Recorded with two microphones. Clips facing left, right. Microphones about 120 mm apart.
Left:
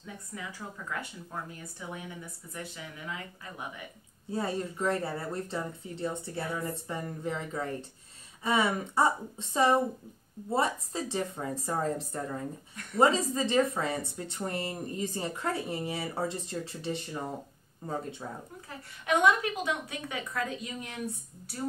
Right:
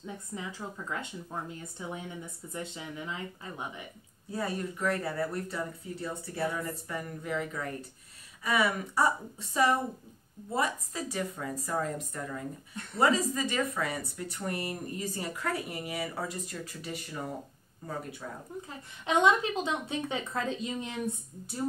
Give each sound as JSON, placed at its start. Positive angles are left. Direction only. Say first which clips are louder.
{"t": 0.0, "sound": "a woman's voice", "louder": "right 3 dB", "side_deg": -25}
{"t": 4.3, "sound": "a woman's voice", "louder": "left 1 dB", "side_deg": 25}
{"t": 18.2, "sound": "a woman's voice", "louder": "left 1 dB", "side_deg": 25}
{"t": 18.7, "sound": "a woman's voice", "louder": "left 2 dB", "side_deg": -25}